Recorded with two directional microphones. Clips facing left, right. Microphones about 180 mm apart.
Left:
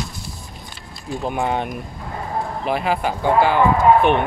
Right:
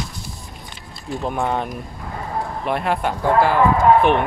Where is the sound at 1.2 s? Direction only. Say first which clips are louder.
Even; 5° left (ahead or behind).